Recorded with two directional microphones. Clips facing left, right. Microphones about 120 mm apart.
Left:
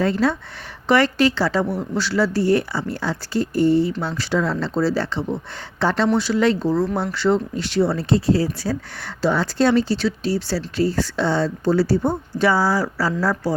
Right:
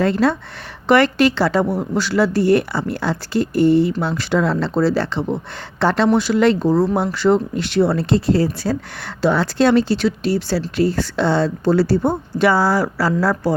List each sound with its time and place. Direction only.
0.0 s speech: 70° right (ahead or behind)
4.0 s speech: 55° right (ahead or behind)
6.1 s speech: 55° right (ahead or behind)
6.7 s speech: 40° right (ahead or behind); by 13.5 s 65° right (ahead or behind)